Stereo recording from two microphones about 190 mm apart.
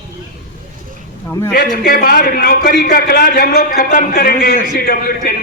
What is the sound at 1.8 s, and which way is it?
A man's voice, 50° left (ahead or behind).